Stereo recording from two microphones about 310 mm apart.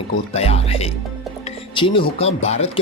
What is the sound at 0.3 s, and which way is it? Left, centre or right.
Speech, centre.